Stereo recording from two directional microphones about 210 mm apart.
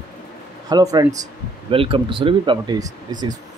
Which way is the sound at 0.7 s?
20° right (ahead or behind).